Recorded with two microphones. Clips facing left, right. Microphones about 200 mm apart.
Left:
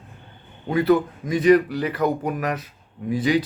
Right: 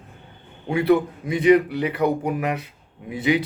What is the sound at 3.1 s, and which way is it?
Speech, 25° right (ahead or behind).